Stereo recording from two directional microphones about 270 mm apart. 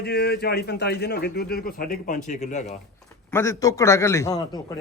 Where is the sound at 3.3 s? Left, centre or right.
Centre.